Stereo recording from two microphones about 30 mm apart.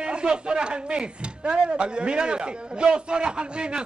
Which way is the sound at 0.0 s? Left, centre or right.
Right.